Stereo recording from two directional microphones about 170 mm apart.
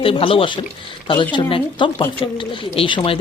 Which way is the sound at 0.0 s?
35° left (ahead or behind).